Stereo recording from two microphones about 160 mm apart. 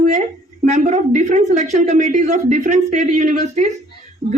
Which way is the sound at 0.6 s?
50° right (ahead or behind).